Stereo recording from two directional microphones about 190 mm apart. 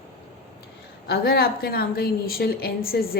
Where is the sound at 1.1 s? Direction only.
55° left (ahead or behind).